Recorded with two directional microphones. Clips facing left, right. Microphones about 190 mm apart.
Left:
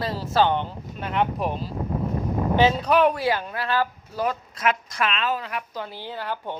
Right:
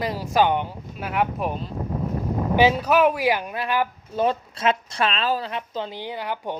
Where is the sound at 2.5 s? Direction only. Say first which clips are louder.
Right 1 dB; 10° right (ahead or behind).